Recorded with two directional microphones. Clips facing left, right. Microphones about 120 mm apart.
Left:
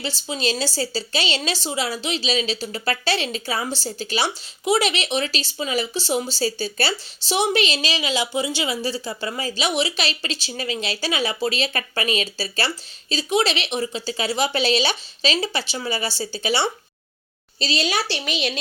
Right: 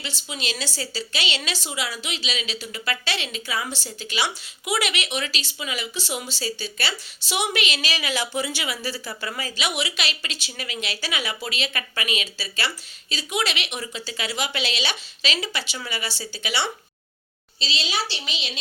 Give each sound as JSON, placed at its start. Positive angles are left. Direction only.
{"t": 0.0, "sound": "a woman's voice", "side_deg": 35}
{"t": 17.6, "sound": "a woman's voice", "side_deg": 45}